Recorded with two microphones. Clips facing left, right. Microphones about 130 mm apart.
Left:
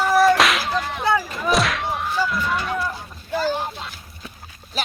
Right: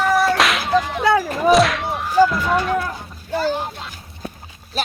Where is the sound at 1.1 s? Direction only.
45° right (ahead or behind).